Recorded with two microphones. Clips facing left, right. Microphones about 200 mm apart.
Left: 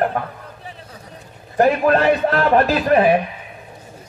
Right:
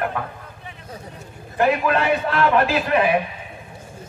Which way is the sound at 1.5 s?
40° left (ahead or behind).